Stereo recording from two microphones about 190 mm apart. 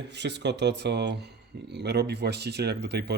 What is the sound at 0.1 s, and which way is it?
Speech, 65° right (ahead or behind).